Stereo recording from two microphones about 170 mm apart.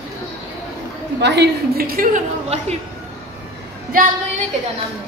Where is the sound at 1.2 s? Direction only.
80° right; by 2.8 s 45° right (ahead or behind).